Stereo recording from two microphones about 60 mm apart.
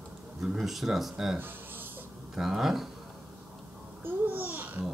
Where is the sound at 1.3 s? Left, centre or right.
Right.